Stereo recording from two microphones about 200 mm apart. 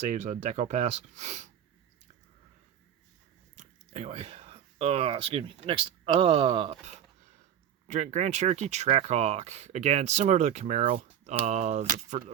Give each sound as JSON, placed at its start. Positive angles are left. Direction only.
{"t": 0.0, "sound": "speech", "side_deg": -35}
{"t": 3.5, "sound": "speech", "side_deg": -30}